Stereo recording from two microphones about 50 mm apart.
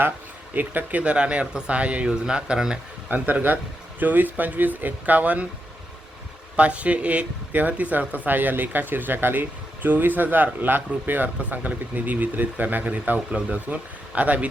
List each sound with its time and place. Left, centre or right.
0.5 s speech: right; by 2.7 s centre
3.1 s speech: right
6.6 s speech: right